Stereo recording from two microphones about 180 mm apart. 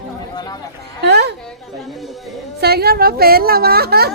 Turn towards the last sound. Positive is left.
turn(degrees=-60)  # may be behind; listen again after turning